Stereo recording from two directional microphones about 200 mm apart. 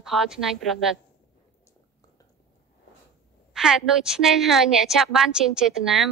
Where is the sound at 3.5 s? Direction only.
5° right (ahead or behind).